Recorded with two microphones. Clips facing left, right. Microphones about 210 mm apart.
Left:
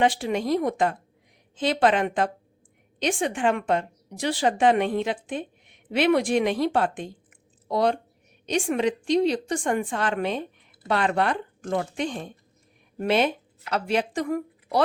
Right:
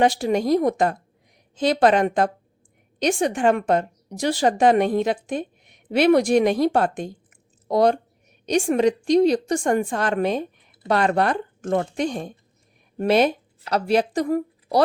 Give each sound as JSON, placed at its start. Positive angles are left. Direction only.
{"t": 0.0, "sound": "a woman's voice", "side_deg": -40}